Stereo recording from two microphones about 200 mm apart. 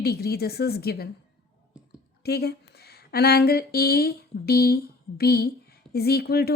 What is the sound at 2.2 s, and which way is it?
A woman's voice, 55° left (ahead or behind).